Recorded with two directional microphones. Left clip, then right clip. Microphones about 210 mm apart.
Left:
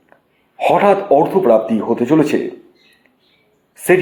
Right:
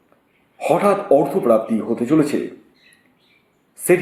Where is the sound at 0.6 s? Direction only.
5° left (ahead or behind).